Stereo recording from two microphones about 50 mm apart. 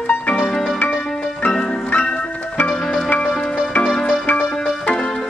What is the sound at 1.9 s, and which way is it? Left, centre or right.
Music, left.